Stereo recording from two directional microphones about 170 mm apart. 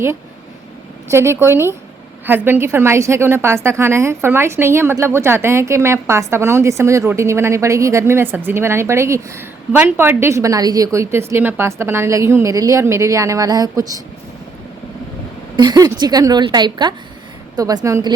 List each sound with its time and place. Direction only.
1.0 s a woman's voice: 15° right (ahead or behind)
15.5 s a woman's voice: 25° right (ahead or behind)